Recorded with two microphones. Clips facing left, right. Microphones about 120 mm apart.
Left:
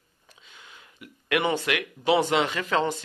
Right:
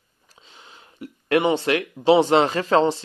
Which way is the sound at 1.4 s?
30° right (ahead or behind).